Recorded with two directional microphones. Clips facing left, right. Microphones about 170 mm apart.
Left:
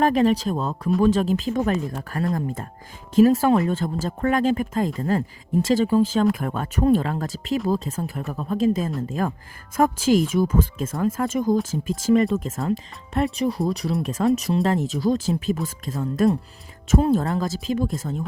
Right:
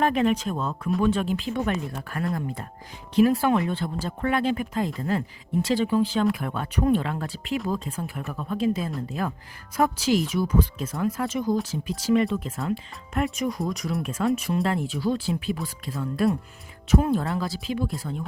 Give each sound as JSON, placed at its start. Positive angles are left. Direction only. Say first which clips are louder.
{"t": 0.0, "sound": "speech", "louder": "left 4 dB", "side_deg": 35}